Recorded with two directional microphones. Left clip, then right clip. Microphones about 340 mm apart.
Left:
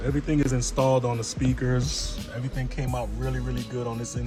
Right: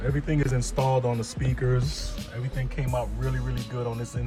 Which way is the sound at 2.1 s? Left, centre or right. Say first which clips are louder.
Left 1 dB; centre.